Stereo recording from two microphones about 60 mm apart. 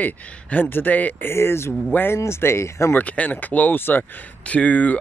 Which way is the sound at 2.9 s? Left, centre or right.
Left.